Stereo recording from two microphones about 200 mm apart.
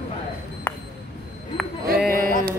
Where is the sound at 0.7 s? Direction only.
10° left (ahead or behind).